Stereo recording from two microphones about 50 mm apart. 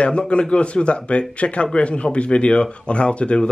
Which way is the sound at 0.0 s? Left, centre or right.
Left.